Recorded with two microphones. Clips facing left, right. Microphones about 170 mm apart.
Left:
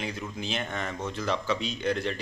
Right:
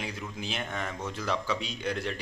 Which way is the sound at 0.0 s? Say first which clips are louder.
Left 3 dB; 5° right (ahead or behind).